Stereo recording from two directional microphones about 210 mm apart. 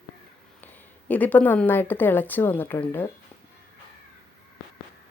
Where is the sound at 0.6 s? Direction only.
10° left (ahead or behind).